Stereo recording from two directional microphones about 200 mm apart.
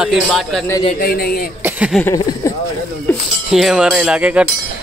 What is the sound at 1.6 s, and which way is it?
Speech, 10° right (ahead or behind).